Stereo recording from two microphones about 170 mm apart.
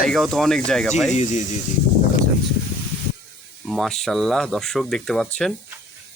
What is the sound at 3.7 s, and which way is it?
Speech, centre (ahead or behind).